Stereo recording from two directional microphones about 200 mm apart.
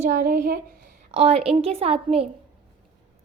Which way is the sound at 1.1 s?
30° right (ahead or behind).